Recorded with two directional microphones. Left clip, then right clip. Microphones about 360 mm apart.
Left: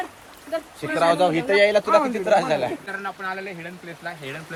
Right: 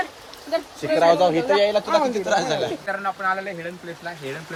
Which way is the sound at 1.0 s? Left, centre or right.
Left.